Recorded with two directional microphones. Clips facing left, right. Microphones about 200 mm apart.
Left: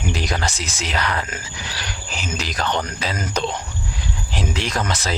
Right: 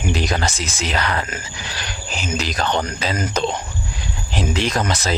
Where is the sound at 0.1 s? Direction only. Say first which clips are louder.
Right 3 dB; 25° right (ahead or behind).